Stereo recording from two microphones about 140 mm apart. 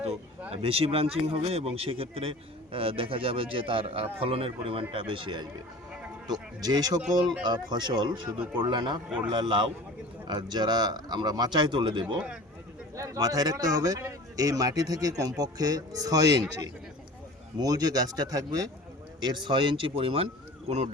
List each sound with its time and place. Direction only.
0.5 s a man's voice: 45° right (ahead or behind)